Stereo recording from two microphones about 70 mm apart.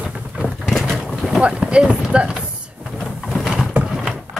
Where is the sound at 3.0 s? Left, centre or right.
Centre.